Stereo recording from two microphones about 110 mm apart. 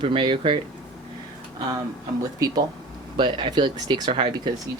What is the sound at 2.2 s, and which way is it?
Speech, 35° right (ahead or behind).